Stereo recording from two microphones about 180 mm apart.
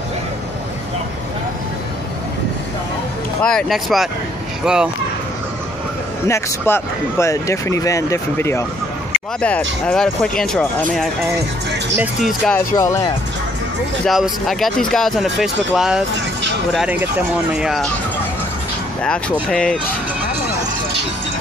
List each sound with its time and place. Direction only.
3.4 s speech: centre (ahead or behind)
6.2 s speech: 15° left (ahead or behind)
12.5 s speech: 15° left (ahead or behind)
14.0 s speech: centre (ahead or behind)
19.5 s speech: 5° left (ahead or behind)